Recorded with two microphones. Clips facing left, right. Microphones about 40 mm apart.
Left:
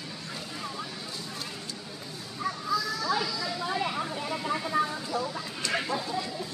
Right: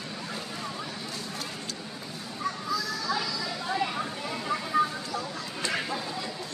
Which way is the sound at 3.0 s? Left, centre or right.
Centre.